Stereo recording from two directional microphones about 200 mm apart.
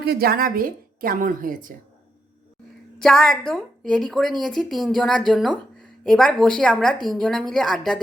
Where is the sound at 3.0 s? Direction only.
Centre (ahead or behind).